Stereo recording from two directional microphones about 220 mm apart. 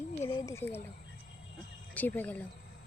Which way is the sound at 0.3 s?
20° left (ahead or behind).